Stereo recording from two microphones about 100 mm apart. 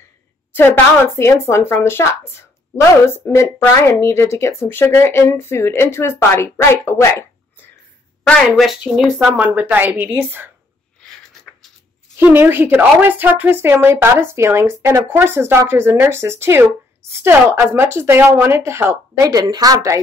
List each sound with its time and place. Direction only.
0.6 s speech: 20° left (ahead or behind)
3.1 s speech: 25° left (ahead or behind)
8.5 s speech: centre (ahead or behind)
9.2 s a woman's voice: 15° right (ahead or behind)
12.2 s a woman's voice: 20° right (ahead or behind)
19.3 s a woman's voice: 40° right (ahead or behind)